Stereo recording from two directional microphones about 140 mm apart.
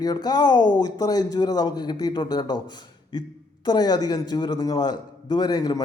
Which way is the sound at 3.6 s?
30° left (ahead or behind).